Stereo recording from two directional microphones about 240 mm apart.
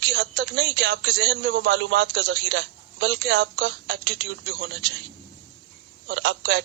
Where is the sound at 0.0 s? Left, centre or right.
Right.